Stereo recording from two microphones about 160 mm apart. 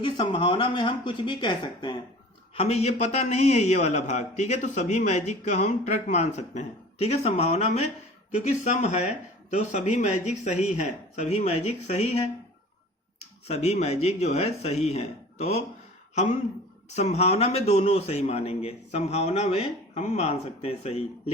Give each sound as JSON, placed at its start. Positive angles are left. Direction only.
{"t": 0.0, "sound": "speech", "side_deg": 30}
{"t": 2.6, "sound": "a man's voice", "side_deg": 40}
{"t": 13.5, "sound": "a man's voice", "side_deg": 45}